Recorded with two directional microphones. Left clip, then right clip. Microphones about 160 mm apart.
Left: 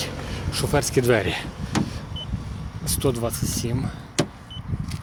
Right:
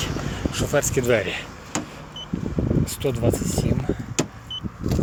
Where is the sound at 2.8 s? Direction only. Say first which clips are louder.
Left 4 dB; 45° left (ahead or behind).